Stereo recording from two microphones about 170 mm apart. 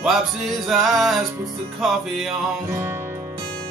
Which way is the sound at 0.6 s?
Centre (ahead or behind).